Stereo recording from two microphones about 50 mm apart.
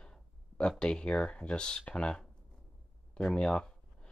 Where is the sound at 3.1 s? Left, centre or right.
Centre.